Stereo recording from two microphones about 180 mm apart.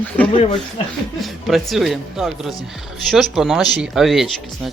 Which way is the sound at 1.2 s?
Centre (ahead or behind).